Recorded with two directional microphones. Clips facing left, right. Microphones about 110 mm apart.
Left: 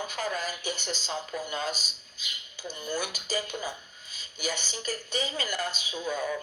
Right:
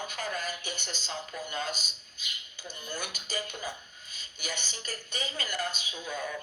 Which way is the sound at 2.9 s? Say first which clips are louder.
Left 5 dB; 40° left (ahead or behind).